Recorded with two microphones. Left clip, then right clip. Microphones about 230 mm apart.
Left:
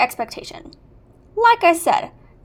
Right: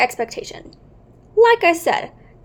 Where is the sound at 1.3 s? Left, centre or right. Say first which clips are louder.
Right 1 dB; centre.